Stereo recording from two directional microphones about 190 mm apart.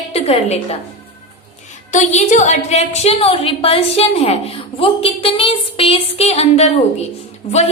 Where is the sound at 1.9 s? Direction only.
40° left (ahead or behind).